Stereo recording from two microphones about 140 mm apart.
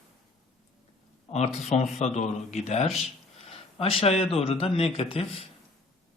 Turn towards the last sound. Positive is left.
turn(degrees=45)  # may be behind; listen again after turning